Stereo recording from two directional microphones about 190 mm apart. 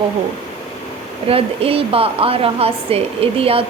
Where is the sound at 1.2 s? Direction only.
30° right (ahead or behind).